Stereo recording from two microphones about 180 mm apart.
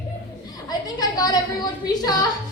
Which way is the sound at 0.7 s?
20° left (ahead or behind).